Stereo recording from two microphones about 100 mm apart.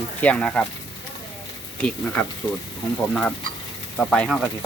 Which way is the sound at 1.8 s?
15° left (ahead or behind).